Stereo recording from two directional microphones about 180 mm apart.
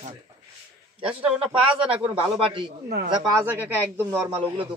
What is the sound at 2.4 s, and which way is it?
Speech, 30° right (ahead or behind).